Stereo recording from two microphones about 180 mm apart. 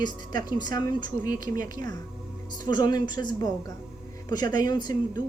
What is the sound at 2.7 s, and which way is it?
Speech, 25° left (ahead or behind).